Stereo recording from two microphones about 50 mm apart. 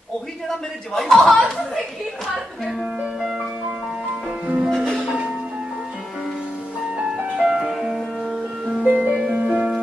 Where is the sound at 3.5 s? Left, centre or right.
Right.